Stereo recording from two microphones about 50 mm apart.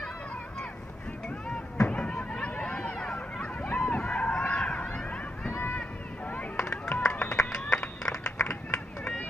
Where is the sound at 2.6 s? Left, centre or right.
Left.